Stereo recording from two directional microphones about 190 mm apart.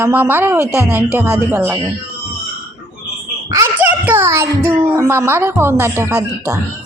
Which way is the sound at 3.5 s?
10° right (ahead or behind).